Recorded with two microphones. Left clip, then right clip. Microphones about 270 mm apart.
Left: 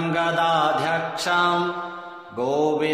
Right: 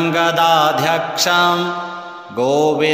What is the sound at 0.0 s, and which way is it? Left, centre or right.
Mantra, right.